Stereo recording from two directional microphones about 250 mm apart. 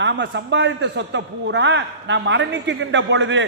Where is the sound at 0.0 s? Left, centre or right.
Right.